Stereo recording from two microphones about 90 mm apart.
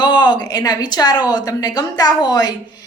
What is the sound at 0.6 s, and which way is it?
A woman's voice, 45° left (ahead or behind).